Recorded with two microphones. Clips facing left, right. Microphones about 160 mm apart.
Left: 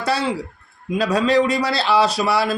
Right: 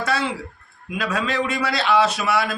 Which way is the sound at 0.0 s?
30° left (ahead or behind).